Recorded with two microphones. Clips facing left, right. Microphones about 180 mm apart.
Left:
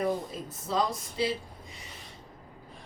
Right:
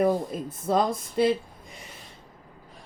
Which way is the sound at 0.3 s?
55° right (ahead or behind).